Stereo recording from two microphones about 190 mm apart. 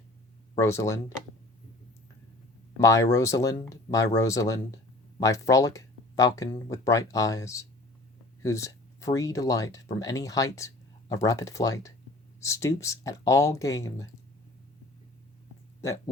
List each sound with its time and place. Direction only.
0.6 s speech: 15° left (ahead or behind)
2.8 s speech: 15° left (ahead or behind)